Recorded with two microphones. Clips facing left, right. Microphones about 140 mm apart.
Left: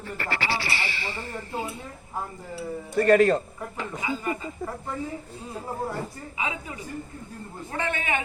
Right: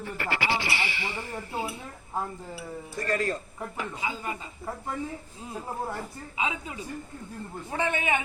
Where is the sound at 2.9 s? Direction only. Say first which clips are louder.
Left 11 dB; 70° left (ahead or behind).